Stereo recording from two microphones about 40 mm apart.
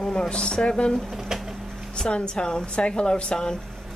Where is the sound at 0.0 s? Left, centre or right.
Centre.